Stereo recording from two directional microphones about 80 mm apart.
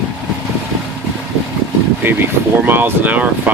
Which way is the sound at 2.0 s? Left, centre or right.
Right.